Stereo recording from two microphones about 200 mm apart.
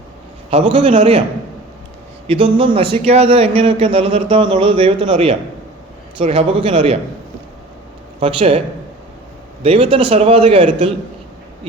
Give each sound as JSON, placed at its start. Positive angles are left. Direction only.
{"t": 0.5, "sound": "a man's voice", "side_deg": -25}
{"t": 2.2, "sound": "a man's voice", "side_deg": -25}
{"t": 8.2, "sound": "a man's voice", "side_deg": -30}
{"t": 9.6, "sound": "a man's voice", "side_deg": -25}